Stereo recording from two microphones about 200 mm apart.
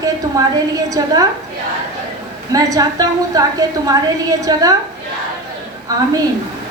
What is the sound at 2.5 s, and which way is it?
A woman's voice, 20° right (ahead or behind).